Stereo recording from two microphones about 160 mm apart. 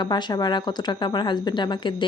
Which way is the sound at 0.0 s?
25° left (ahead or behind).